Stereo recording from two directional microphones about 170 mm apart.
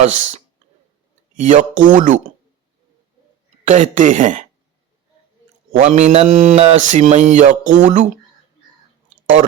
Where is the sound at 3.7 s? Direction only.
45° right (ahead or behind).